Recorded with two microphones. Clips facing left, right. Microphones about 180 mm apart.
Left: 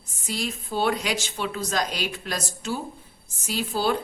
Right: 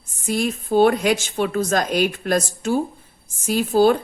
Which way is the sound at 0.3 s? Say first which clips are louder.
Right 9 dB; 50° right (ahead or behind).